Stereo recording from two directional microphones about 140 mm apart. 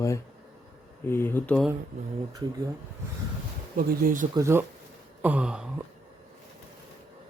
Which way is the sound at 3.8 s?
75° right (ahead or behind).